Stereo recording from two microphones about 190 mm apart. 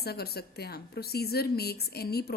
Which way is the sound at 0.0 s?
55° left (ahead or behind).